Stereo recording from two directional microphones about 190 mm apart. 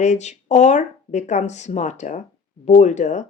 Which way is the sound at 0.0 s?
40° left (ahead or behind).